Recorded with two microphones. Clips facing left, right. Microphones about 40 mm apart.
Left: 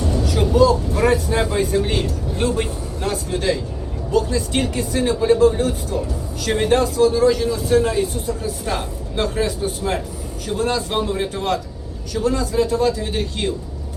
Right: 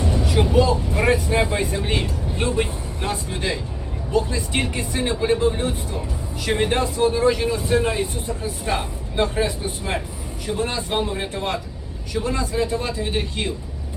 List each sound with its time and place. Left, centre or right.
0.0 s speech: right